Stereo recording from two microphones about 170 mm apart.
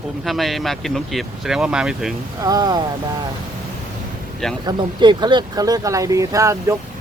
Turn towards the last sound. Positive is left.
turn(degrees=-15)  # may be behind; listen again after turning